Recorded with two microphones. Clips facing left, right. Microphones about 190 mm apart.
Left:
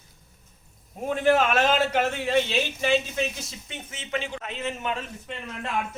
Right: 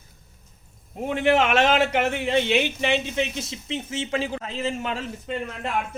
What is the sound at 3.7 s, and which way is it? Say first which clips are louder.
A man's voice: right 5 dB; 30° right (ahead or behind).